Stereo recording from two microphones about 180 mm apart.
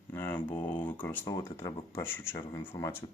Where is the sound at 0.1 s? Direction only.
10° left (ahead or behind).